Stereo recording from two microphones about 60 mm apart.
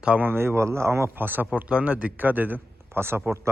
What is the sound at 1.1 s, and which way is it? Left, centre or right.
Speech, right.